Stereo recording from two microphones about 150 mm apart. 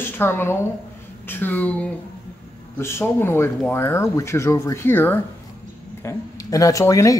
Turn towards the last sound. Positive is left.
turn(degrees=20)  # may be behind; listen again after turning